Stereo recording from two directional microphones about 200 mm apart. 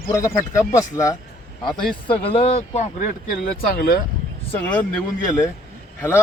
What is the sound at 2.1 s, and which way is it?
Speech, 30° left (ahead or behind).